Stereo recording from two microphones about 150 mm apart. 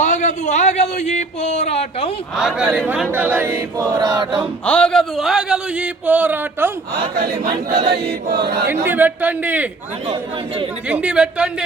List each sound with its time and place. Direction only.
0.0 s a man's voice: 50° left (ahead or behind)
2.3 s choir: centre (ahead or behind); by 4.4 s 30° right (ahead or behind)
4.6 s a sound: 5° left (ahead or behind); by 6.7 s 15° right (ahead or behind)
7.8 s choir: 90° right
8.6 s choir: 15° right (ahead or behind)
10.8 s choir: 10° right (ahead or behind)